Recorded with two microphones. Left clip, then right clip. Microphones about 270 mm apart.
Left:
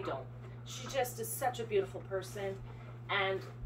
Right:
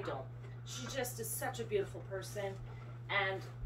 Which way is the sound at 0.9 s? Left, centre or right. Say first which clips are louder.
Left 6 dB; centre.